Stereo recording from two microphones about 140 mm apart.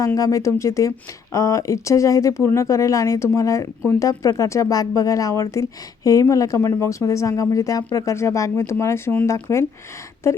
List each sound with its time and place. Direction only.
0.0 s speech: 25° left (ahead or behind)